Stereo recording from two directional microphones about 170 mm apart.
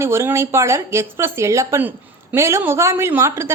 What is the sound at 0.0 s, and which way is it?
A woman's voice, 15° right (ahead or behind).